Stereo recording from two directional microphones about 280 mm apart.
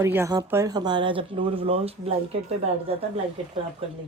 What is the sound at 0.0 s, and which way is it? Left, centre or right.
Speech, centre.